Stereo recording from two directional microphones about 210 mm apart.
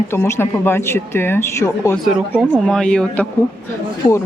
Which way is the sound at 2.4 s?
Centre (ahead or behind).